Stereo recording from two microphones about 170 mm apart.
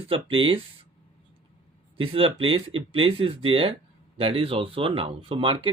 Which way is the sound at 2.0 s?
35° right (ahead or behind).